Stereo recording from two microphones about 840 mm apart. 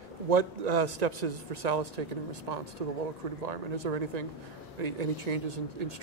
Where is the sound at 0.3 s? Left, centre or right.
Right.